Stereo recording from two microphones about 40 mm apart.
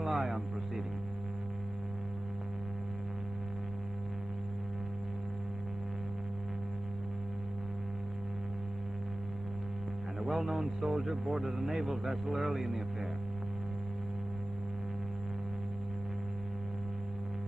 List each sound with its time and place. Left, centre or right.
0.0 s hum: centre
10.2 s a man's voice: centre